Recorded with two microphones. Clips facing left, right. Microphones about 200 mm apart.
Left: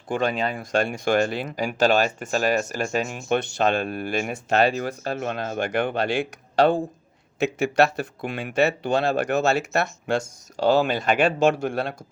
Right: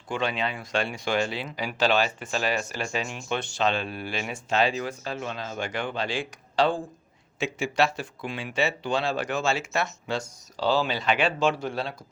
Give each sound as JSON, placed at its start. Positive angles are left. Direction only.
{"t": 0.1, "sound": "speech", "side_deg": 45}